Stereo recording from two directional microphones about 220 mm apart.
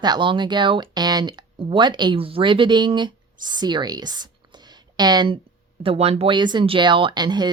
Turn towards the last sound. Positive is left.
turn(degrees=-20)  # may be behind; listen again after turning